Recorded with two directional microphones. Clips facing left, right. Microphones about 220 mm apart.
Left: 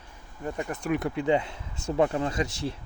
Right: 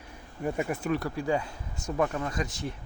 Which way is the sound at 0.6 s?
10° right (ahead or behind).